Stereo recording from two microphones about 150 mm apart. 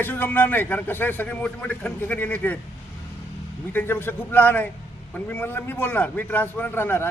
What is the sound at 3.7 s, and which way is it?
A man's voice, 15° left (ahead or behind).